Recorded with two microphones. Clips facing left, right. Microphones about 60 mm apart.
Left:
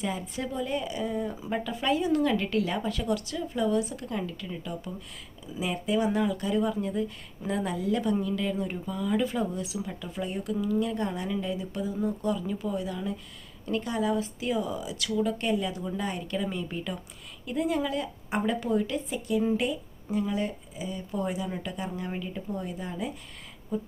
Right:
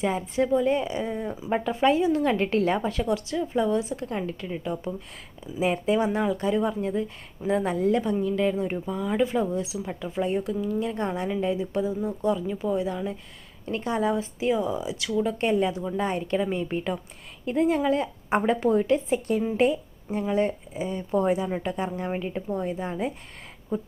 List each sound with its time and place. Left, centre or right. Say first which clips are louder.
0.0 s speech: right 7 dB; right